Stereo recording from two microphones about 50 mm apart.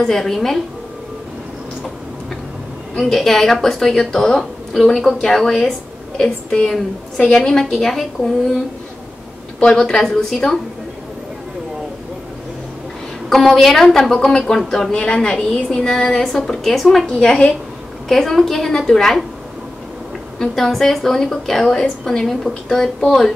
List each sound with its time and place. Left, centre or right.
0.0 s a woman's voice: centre
3.0 s a woman's voice: centre
7.4 s a woman's voice: centre
9.6 s a woman's voice: centre
13.3 s a woman's voice: centre
15.9 s a woman's voice: centre
17.2 s a woman's voice: centre
20.3 s a woman's voice: centre